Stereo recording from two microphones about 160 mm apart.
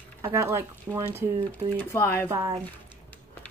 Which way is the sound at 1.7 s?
10° left (ahead or behind).